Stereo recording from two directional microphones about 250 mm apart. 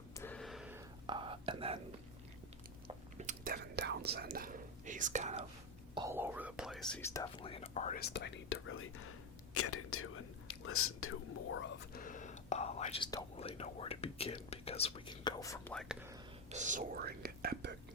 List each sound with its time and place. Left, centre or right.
0.2 s a sound: centre
1.0 s whispering: centre
2.8 s whispering: right
5.9 s whispering: centre
6.9 s speech: centre; by 11.7 s left
11.9 s whispering: left; by 16.0 s centre
16.5 s speech: right